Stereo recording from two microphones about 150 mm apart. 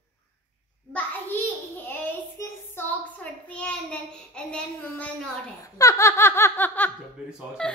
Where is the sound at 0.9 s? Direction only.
15° left (ahead or behind).